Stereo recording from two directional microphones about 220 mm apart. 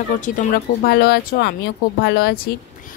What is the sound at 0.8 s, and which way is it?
A woman's voice, 45° left (ahead or behind).